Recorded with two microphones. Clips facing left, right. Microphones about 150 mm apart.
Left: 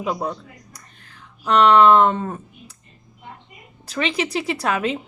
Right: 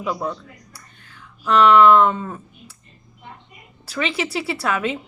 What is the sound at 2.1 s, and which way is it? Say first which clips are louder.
Speech: left 3 dB; 40° left (ahead or behind).